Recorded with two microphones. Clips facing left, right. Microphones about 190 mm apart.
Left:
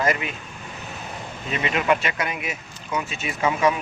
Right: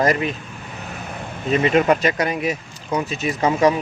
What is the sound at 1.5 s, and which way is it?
Speech, 40° right (ahead or behind).